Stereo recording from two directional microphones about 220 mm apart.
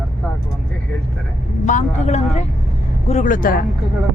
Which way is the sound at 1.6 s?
35° left (ahead or behind).